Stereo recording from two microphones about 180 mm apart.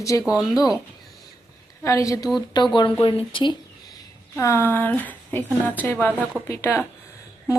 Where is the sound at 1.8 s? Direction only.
15° left (ahead or behind).